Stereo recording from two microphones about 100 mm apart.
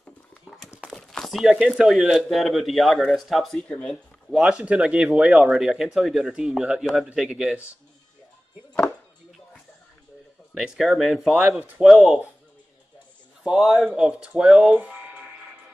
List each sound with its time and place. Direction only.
0.0 s a sound: centre (ahead or behind)
0.9 s speech: 5° left (ahead or behind)
4.3 s speech: 5° right (ahead or behind)
10.5 s speech: 5° right (ahead or behind)
13.4 s speech: 5° right (ahead or behind)